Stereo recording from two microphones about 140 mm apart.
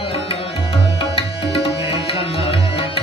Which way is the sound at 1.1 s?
45° left (ahead or behind).